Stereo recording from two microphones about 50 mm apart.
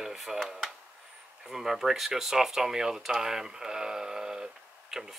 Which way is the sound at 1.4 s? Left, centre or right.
Centre.